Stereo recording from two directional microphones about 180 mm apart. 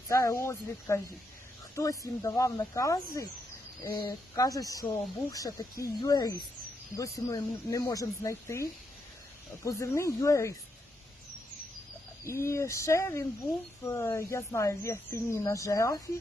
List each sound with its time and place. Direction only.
0.1 s speech: 15° left (ahead or behind)
12.2 s speech: 15° left (ahead or behind)